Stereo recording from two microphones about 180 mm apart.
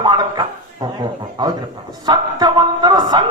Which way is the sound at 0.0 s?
25° right (ahead or behind).